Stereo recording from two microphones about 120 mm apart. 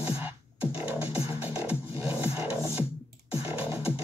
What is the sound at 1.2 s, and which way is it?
Music, 20° right (ahead or behind).